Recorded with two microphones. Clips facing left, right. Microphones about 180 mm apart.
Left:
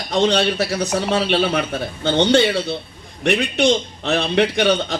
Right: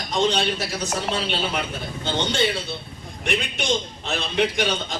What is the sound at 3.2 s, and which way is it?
A man's voice, 70° left (ahead or behind).